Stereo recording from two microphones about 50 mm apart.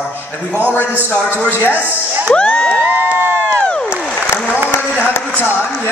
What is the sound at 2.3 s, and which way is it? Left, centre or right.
Speech, left.